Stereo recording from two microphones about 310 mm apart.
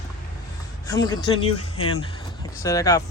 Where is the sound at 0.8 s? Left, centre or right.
Centre.